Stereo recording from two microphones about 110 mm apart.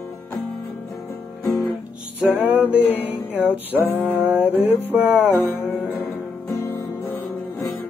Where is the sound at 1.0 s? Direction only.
25° left (ahead or behind).